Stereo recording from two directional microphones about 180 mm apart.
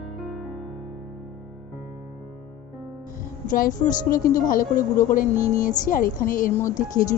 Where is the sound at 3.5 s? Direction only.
50° left (ahead or behind).